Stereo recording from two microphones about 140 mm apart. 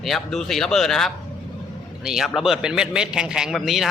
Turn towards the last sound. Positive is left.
turn(degrees=0)  # may be behind; listen again after turning